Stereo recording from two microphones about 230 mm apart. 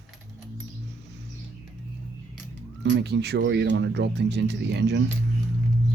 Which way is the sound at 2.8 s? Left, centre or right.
Right.